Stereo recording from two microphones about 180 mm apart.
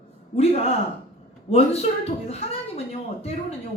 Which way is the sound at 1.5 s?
35° left (ahead or behind).